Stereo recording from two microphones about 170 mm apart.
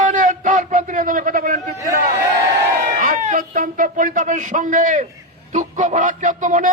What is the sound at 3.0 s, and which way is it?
A man's voice, 50° right (ahead or behind).